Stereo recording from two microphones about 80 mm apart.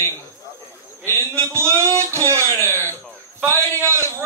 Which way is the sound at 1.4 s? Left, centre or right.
Right.